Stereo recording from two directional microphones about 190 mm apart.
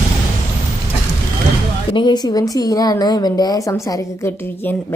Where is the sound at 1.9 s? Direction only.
25° left (ahead or behind).